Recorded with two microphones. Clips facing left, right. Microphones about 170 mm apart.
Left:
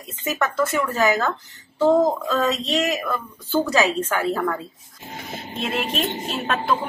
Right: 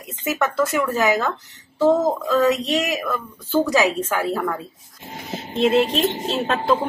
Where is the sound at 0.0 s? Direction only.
10° right (ahead or behind).